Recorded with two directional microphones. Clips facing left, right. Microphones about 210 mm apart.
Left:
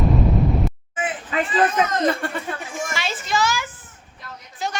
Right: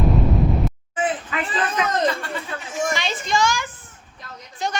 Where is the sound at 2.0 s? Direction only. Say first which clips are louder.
Left 2 dB; 55° left (ahead or behind).